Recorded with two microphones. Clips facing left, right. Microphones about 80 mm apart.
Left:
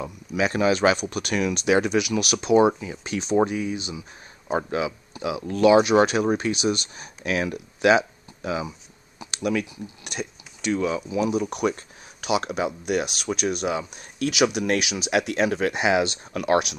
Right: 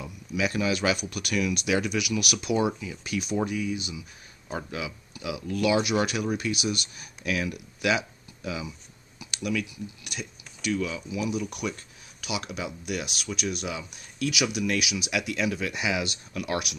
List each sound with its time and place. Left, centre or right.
0.0 s speech: left
4.5 s speech: left
14.3 s speech: left
15.0 s speech: left